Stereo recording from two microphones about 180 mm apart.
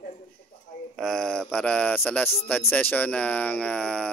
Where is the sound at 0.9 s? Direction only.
5° left (ahead or behind).